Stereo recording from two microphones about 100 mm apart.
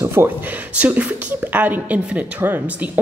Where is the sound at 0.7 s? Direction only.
15° right (ahead or behind).